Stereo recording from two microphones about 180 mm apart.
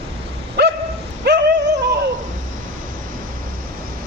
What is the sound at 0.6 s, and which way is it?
Dog, 65° right (ahead or behind).